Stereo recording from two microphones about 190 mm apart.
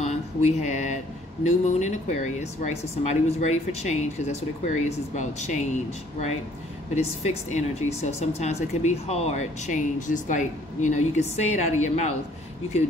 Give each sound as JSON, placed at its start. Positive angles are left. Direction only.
{"t": 0.0, "sound": "a sound", "side_deg": 35}
{"t": 1.4, "sound": "speech", "side_deg": 40}
{"t": 7.0, "sound": "speech", "side_deg": 35}